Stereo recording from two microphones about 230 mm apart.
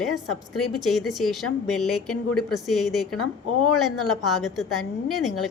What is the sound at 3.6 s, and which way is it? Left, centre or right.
Speech, left.